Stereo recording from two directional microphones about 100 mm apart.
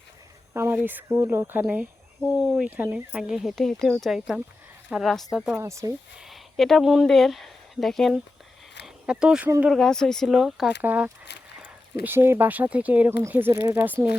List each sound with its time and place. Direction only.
0.5 s speech: 25° right (ahead or behind)
1.6 s speech: 10° right (ahead or behind)
5.5 s speech: 30° right (ahead or behind)
6.1 s speech: centre (ahead or behind)
9.0 s speech: 10° right (ahead or behind)
9.6 s speech: 5° left (ahead or behind)
10.8 s speech: 15° right (ahead or behind)